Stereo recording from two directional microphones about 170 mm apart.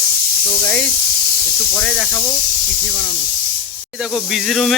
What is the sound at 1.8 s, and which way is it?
Speech, 5° left (ahead or behind).